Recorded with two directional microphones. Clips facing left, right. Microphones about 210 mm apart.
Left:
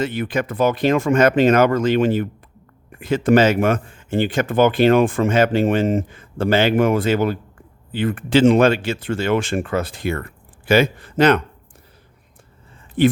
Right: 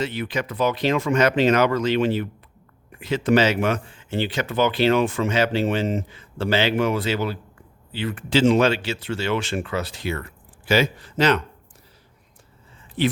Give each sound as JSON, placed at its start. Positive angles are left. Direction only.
{"t": 0.0, "sound": "speech", "side_deg": 50}
{"t": 13.0, "sound": "speech", "side_deg": 50}